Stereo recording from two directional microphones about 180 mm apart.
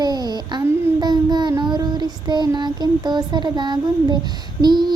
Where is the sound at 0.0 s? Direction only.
20° right (ahead or behind).